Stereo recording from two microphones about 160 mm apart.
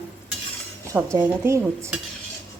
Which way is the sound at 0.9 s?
15° right (ahead or behind).